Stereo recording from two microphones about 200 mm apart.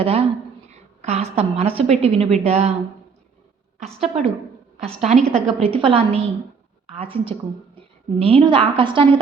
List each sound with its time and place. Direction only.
0.0 s a woman's voice: 30° right (ahead or behind)
3.8 s a woman's voice: 35° right (ahead or behind)